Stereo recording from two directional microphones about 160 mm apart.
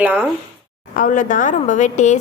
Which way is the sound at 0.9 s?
55° left (ahead or behind).